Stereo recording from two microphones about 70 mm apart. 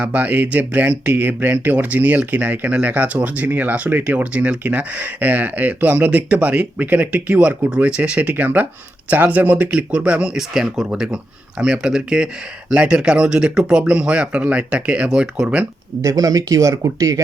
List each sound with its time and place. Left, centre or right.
0.0 s speech: right
16.0 s speech: right